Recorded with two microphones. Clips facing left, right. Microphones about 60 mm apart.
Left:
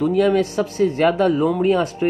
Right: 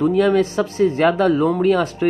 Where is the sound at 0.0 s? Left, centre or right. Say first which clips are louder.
Right 1 dB; right.